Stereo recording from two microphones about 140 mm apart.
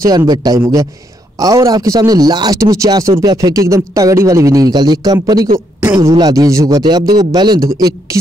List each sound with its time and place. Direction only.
0.0 s a man's voice: 25° right (ahead or behind)